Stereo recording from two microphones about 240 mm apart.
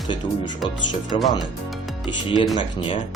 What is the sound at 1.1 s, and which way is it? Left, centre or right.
Speech, left.